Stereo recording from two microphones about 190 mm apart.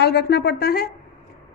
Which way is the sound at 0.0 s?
60° left (ahead or behind).